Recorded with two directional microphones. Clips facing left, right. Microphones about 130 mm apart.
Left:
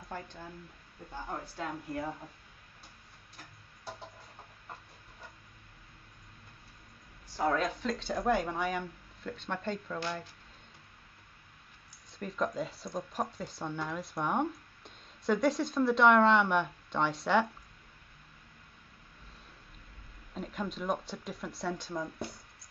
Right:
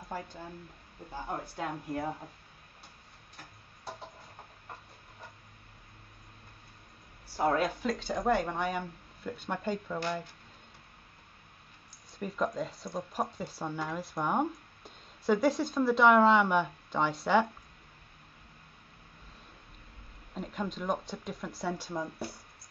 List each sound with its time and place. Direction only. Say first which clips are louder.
1.9 s speech: right 3 dB; 25° right (ahead or behind)
7.3 s speech: right 2 dB; 10° right (ahead or behind)
12.2 s speech: right 1 dB; 5° right (ahead or behind)
20.3 s speech: right 1 dB; centre (ahead or behind)